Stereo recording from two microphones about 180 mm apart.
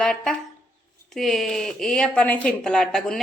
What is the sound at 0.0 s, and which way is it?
A woman's voice, 5° left (ahead or behind).